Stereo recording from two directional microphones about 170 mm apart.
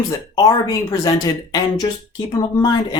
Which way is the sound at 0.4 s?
20° left (ahead or behind).